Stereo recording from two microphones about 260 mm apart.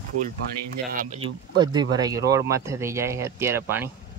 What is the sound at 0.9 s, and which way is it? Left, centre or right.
Speech, right.